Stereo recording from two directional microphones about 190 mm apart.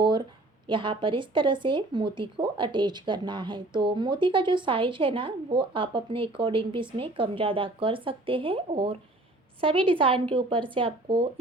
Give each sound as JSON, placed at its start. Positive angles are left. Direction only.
{"t": 0.7, "sound": "speech", "side_deg": -25}